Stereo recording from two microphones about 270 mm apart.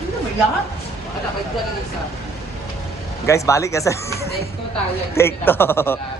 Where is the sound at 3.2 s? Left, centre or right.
Centre.